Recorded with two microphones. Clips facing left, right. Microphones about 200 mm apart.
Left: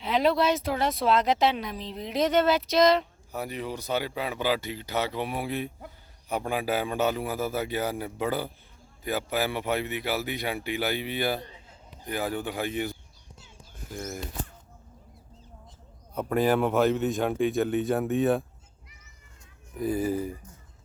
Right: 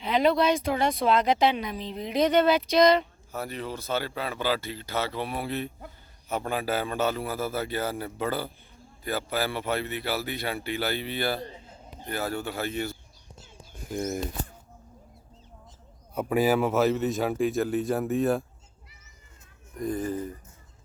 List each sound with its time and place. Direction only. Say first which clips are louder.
0.0 s speech: right 1 dB; centre (ahead or behind)
3.3 s speech: left 1 dB; 15° left (ahead or behind)
13.9 s speech: right 6 dB; 25° right (ahead or behind)
16.1 s speech: right 1 dB; 10° right (ahead or behind)
19.7 s speech: left 2 dB; 5° left (ahead or behind)